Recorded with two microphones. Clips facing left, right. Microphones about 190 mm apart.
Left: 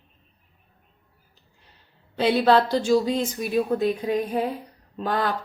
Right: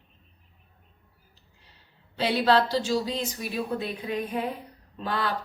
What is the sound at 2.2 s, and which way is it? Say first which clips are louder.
Speech: left 4 dB; 50° left (ahead or behind).